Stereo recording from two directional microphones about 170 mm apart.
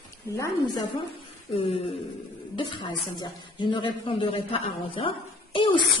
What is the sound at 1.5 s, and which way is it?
A woman's voice, 35° left (ahead or behind).